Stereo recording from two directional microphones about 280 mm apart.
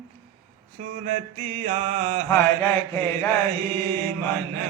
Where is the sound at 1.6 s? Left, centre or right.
Right.